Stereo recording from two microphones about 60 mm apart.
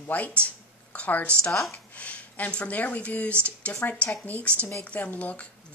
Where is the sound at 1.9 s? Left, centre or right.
Left.